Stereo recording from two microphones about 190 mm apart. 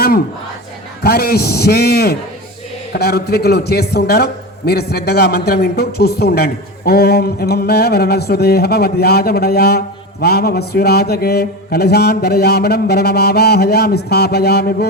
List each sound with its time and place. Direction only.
1.0 s a man's voice: 55° left (ahead or behind)